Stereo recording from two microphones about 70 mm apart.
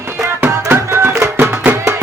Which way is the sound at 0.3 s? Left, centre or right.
Right.